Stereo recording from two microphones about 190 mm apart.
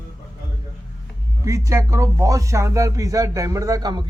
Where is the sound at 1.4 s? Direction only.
15° right (ahead or behind).